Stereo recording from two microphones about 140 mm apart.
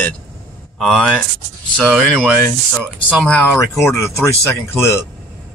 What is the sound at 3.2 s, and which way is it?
Speech, 10° left (ahead or behind).